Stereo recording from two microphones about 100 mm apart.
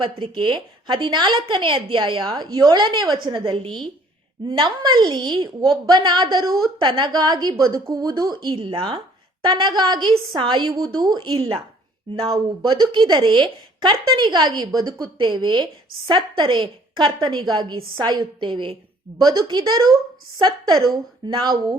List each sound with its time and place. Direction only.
0.0 s speech: 55° right (ahead or behind)
3.3 s a woman's voice: 60° right (ahead or behind)
6.4 s a woman's voice: 40° right (ahead or behind); by 18.8 s 55° right (ahead or behind)
19.2 s speech: 45° right (ahead or behind)